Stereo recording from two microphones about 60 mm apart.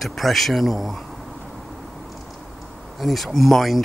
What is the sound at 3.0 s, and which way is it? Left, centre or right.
Speech, centre.